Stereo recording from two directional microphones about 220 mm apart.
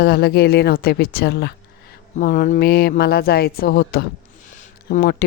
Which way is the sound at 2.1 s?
35° left (ahead or behind).